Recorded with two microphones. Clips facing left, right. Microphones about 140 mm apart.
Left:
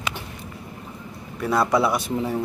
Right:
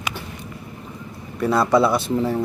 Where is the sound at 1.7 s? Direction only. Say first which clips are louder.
Right 4 dB; 15° left (ahead or behind).